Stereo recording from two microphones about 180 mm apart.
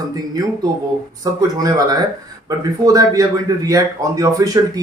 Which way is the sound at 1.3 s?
20° right (ahead or behind).